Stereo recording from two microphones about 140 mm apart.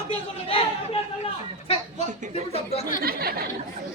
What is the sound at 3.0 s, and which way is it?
Speech, 90° right.